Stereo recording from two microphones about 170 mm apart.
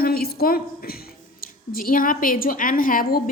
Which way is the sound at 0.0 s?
60° left (ahead or behind).